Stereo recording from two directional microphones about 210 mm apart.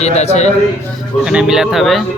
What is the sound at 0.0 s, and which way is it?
Speech, 30° left (ahead or behind).